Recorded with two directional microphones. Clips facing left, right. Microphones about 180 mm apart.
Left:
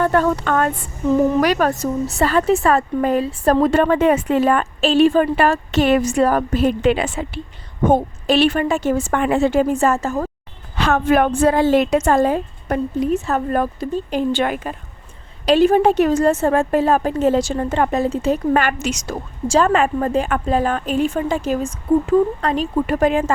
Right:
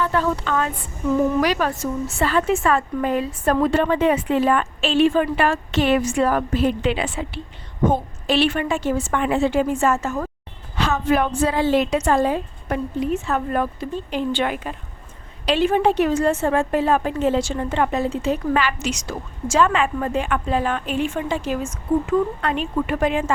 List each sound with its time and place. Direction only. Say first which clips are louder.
0.0 s a woman's voice: left 5 dB; 55° left (ahead or behind); by 10.2 s 35° left (ahead or behind)
10.8 s a woman's voice: left 4 dB; 60° left (ahead or behind)